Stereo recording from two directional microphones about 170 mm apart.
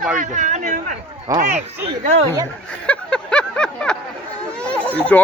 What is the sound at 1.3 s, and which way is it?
Speech, 20° right (ahead or behind).